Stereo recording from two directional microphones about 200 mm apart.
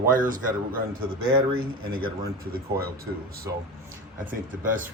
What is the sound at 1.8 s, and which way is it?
Speech, 90° right.